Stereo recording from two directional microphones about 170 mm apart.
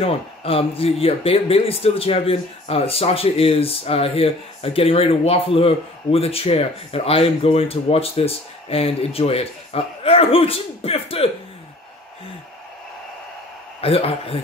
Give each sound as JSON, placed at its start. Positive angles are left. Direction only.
{"t": 0.0, "sound": "speech", "side_deg": 35}
{"t": 13.7, "sound": "speech", "side_deg": 35}